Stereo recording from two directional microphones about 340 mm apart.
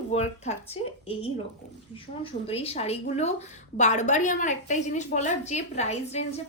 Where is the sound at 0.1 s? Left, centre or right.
Centre.